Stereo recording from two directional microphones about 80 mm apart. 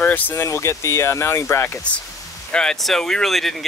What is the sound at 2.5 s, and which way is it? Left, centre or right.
Speech, centre.